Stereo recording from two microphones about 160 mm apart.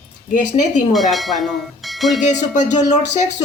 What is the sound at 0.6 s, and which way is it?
Speech, 50° left (ahead or behind).